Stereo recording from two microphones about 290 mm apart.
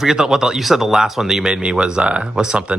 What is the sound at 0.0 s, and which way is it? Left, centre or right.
Speech, centre.